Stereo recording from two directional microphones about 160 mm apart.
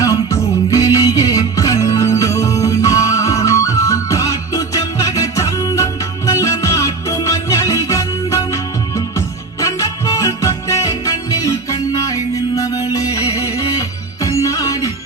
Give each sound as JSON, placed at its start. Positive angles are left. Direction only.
{"t": 0.0, "sound": "music", "side_deg": 20}